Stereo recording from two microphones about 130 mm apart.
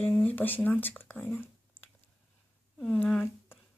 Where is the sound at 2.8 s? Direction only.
10° left (ahead or behind).